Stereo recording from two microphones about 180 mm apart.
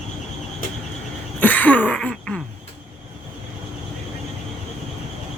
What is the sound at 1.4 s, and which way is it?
Throat clearing, 10° left (ahead or behind).